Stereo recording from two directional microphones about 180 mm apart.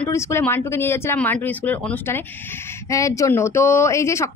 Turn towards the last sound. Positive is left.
turn(degrees=15)  # may be behind; listen again after turning